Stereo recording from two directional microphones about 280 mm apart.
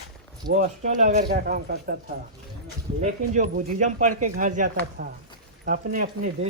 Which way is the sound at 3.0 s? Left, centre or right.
Right.